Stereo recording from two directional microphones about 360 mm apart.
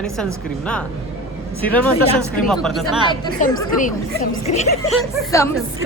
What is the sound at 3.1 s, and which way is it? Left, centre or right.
A woman's voice, centre.